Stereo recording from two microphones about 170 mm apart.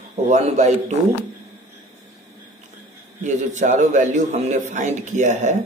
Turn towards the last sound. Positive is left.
turn(degrees=-45)  # may be behind; listen again after turning